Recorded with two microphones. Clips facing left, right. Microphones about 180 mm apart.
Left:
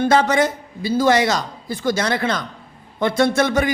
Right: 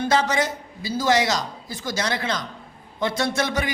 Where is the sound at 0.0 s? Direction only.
55° left (ahead or behind).